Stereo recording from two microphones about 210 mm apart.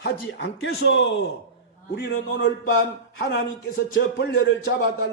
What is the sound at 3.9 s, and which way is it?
Speech, 50° left (ahead or behind).